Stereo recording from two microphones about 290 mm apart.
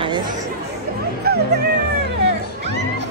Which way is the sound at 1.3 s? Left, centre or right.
Right.